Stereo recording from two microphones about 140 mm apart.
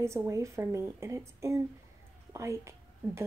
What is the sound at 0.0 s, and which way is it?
Speech, 20° right (ahead or behind).